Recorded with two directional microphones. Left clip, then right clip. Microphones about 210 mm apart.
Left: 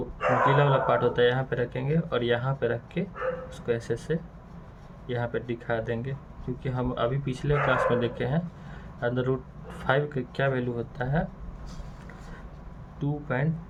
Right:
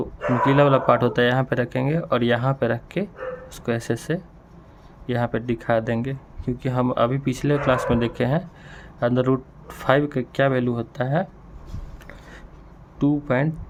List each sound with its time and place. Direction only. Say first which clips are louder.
0.4 s speech: right 8 dB; 55° right (ahead or behind)
13.0 s speech: right 9 dB; 55° right (ahead or behind)